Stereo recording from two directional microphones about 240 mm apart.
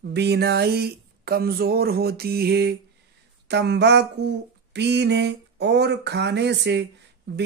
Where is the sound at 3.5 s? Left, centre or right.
Right.